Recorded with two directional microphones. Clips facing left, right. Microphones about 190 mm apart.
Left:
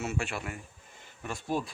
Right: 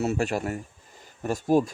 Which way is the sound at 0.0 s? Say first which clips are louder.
Right 8 dB; 40° right (ahead or behind).